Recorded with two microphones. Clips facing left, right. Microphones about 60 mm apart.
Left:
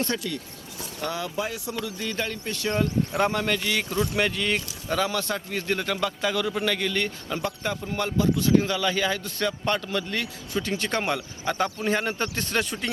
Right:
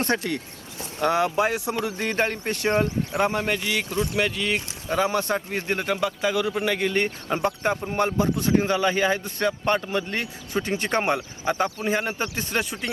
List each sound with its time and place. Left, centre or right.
0.0 s a man's voice: right
4.2 s speech: centre
4.5 s a man's voice: right